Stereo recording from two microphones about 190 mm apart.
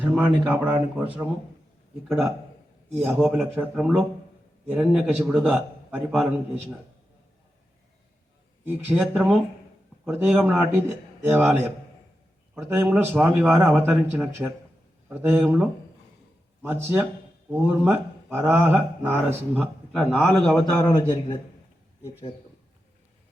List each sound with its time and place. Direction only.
0.0 s speech: 5° right (ahead or behind)
2.0 s a man's voice: centre (ahead or behind)
8.6 s a man's voice: 10° right (ahead or behind)
12.6 s a man's voice: 10° right (ahead or behind)
17.5 s a man's voice: 10° right (ahead or behind)
20.0 s a man's voice: centre (ahead or behind)
20.8 s a man's voice: 20° left (ahead or behind)